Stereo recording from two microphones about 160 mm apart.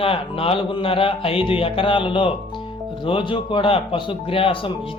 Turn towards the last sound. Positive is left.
turn(degrees=35)  # may be behind; listen again after turning